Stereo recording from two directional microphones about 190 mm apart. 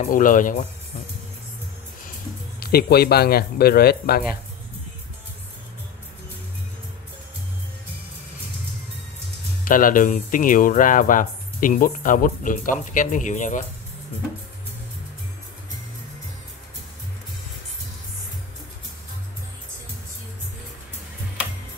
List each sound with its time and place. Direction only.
0.0 s speech: 45° left (ahead or behind)
2.6 s speech: 55° left (ahead or behind)
9.7 s speech: 45° left (ahead or behind)